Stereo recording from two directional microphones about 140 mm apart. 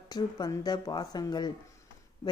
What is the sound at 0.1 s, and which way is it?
Speech, 30° left (ahead or behind).